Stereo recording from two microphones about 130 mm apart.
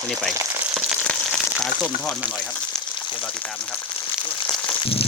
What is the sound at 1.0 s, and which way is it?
Frying, 5° left (ahead or behind).